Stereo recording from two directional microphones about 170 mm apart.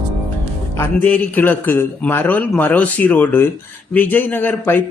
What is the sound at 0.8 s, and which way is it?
A man's voice, 10° left (ahead or behind).